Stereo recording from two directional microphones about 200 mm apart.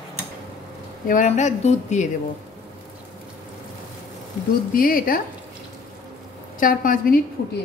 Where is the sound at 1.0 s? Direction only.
40° left (ahead or behind).